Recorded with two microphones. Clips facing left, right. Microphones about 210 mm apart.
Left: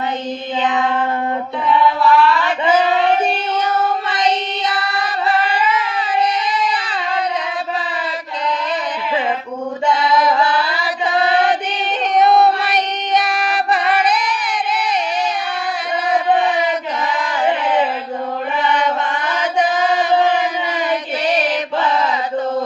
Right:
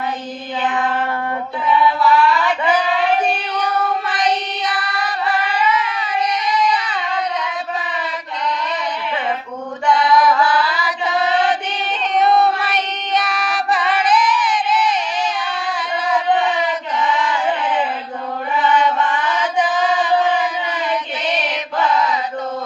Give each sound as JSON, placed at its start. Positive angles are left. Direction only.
{"t": 2.0, "sound": "a sound", "side_deg": 0}
{"t": 4.1, "sound": "music", "side_deg": 25}
{"t": 6.0, "sound": "child singing", "side_deg": 30}
{"t": 9.8, "sound": "music", "side_deg": 25}
{"t": 12.1, "sound": "child singing", "side_deg": 45}
{"t": 13.2, "sound": "singing", "side_deg": 55}